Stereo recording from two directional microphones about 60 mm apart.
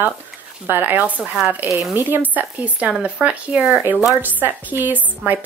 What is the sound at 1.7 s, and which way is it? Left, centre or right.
Speech, centre.